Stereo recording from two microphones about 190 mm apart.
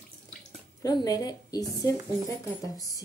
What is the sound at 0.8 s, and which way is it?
Speech, 20° left (ahead or behind).